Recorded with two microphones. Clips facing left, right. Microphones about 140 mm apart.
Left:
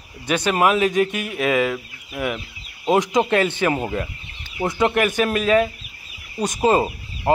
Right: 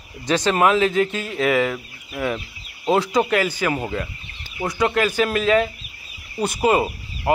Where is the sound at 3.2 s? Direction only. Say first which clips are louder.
Left 2 dB; 25° left (ahead or behind).